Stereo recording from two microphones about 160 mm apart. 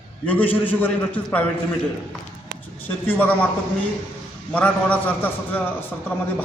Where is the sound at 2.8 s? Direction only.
10° left (ahead or behind).